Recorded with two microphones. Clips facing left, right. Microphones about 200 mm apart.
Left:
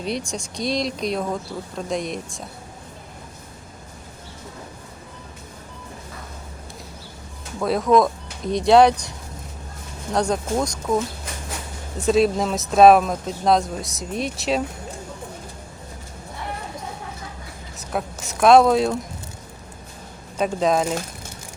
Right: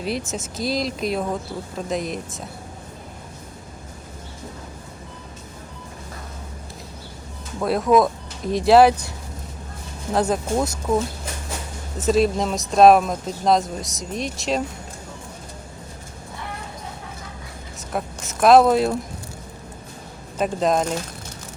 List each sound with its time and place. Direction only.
0.0 s speech: 5° right (ahead or behind)
7.6 s speech: centre (ahead or behind)
10.1 s speech: 5° right (ahead or behind)
17.7 s speech: centre (ahead or behind)
20.4 s speech: centre (ahead or behind)